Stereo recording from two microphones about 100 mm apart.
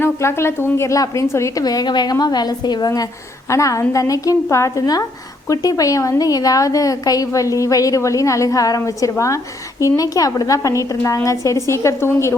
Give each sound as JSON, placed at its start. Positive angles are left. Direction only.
{"t": 0.0, "sound": "a woman's voice", "side_deg": 25}